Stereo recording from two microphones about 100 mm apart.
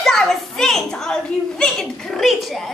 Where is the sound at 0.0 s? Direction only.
5° left (ahead or behind).